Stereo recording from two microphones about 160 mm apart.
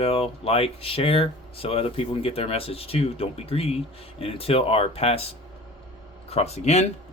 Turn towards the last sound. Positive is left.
turn(degrees=45)  # may be behind; listen again after turning